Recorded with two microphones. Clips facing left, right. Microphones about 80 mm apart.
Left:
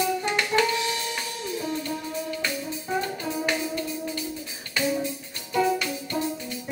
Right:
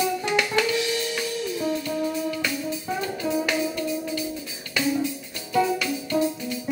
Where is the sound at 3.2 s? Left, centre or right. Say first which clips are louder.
Right 3 dB; left.